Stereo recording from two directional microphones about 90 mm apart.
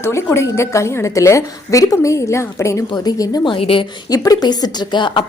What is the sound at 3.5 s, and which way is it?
Speech, 85° left.